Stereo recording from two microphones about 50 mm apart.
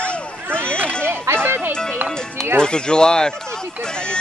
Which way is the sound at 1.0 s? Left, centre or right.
Right.